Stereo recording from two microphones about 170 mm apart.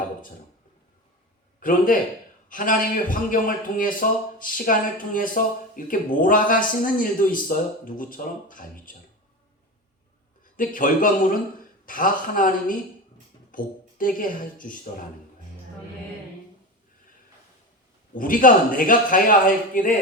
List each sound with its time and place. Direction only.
1.5 s a man's voice: 55° left (ahead or behind)
10.6 s a man's voice: 55° left (ahead or behind)
18.1 s a man's voice: 55° left (ahead or behind)